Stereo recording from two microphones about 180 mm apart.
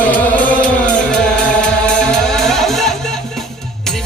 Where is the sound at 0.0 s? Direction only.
10° left (ahead or behind).